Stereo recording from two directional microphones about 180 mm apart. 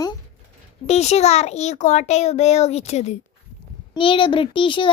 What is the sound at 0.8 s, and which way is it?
A child's voice, 35° left (ahead or behind).